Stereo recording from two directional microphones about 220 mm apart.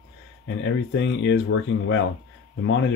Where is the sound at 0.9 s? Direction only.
55° left (ahead or behind).